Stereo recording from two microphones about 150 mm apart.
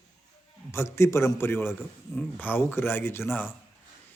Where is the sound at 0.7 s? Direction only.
20° left (ahead or behind).